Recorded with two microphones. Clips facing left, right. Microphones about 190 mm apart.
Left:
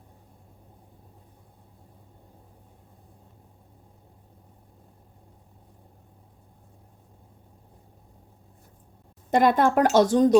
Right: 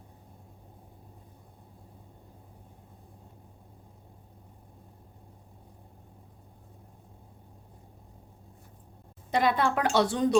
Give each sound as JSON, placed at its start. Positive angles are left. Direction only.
{"t": 9.3, "sound": "speech", "side_deg": 50}